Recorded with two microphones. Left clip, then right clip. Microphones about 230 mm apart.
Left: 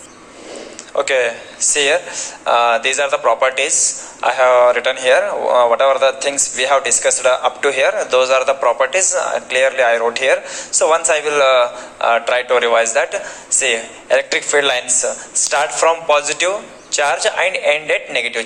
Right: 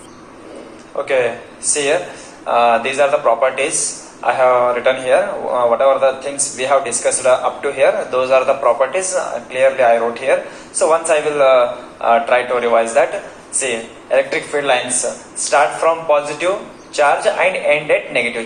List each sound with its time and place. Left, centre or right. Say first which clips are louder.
0.9 s speech: left 1 dB; left